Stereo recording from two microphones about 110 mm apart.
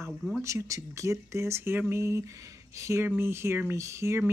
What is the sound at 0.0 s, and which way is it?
Speech, 5° left (ahead or behind).